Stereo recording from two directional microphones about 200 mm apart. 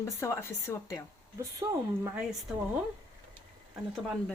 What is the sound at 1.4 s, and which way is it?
Speech, 15° right (ahead or behind).